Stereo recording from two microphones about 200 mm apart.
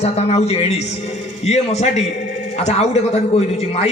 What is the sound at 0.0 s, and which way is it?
A man's voice, 30° left (ahead or behind).